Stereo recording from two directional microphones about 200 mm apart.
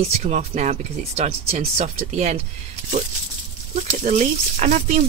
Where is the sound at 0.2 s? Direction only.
35° right (ahead or behind).